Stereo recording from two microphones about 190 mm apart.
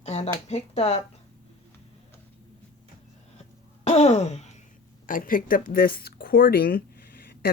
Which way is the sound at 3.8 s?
35° left (ahead or behind).